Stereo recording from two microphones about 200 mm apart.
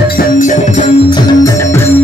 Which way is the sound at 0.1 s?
45° left (ahead or behind).